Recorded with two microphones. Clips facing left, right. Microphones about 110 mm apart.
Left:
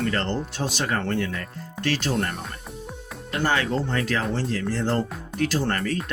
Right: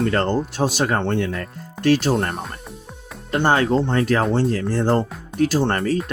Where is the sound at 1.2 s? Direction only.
45° right (ahead or behind).